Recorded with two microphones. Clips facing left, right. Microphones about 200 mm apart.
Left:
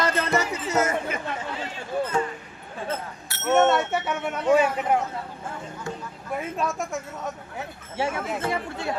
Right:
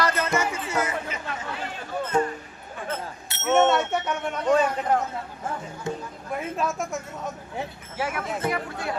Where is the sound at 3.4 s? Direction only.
Centre (ahead or behind).